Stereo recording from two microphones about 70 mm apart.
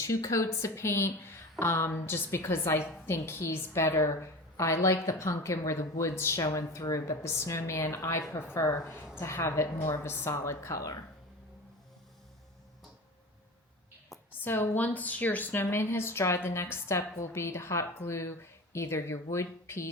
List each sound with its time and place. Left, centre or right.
0.0 s a woman's voice: left
14.4 s a woman's voice: left